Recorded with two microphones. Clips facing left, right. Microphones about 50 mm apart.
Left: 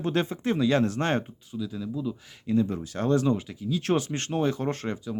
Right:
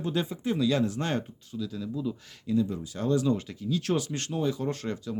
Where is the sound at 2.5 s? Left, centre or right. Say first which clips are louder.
Left 2 dB; left.